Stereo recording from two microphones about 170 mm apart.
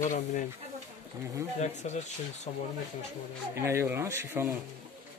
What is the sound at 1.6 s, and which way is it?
Speech, 40° left (ahead or behind).